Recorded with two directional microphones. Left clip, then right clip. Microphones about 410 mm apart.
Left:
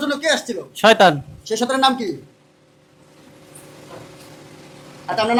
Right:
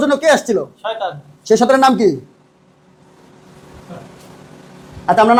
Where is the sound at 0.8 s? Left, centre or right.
Left.